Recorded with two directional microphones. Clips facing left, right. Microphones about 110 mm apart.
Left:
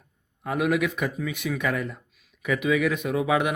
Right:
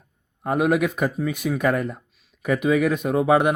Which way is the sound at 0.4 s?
45° right (ahead or behind).